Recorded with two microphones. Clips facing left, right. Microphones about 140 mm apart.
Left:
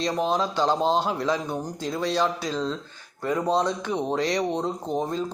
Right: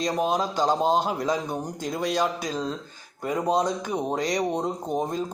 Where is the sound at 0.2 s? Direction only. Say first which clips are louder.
Even; 10° right (ahead or behind).